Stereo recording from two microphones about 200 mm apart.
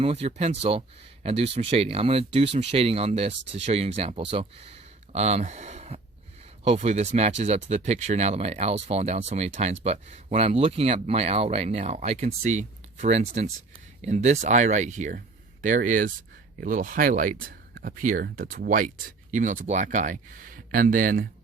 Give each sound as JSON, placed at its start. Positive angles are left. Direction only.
{"t": 0.0, "sound": "speech", "side_deg": -30}